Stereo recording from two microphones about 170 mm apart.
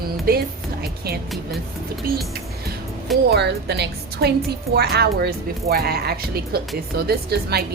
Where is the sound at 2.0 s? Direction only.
60° right (ahead or behind).